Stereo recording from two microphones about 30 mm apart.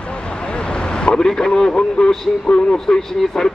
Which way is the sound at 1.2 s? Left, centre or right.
Centre.